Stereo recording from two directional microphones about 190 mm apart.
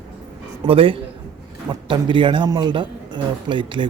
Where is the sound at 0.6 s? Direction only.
30° right (ahead or behind).